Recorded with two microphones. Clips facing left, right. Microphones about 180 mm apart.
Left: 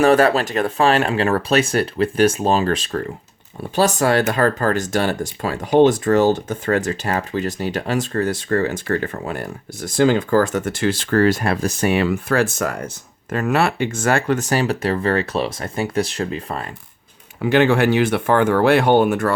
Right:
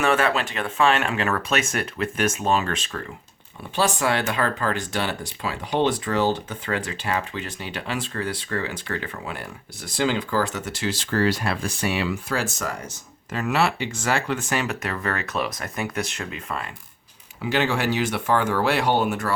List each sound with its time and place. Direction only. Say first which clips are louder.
0.0 s speech: left 7 dB; 40° left (ahead or behind)
17.4 s speech: left 8 dB; 55° left (ahead or behind)